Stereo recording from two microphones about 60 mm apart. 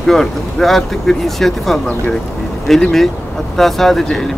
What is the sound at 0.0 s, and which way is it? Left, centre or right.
Speech, centre.